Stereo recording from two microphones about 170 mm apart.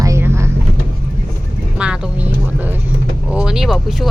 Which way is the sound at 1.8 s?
5° right (ahead or behind).